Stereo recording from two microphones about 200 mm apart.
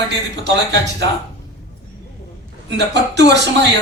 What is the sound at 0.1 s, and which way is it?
Speech, 60° right (ahead or behind).